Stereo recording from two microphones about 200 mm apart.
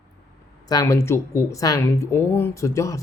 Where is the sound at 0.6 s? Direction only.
20° left (ahead or behind).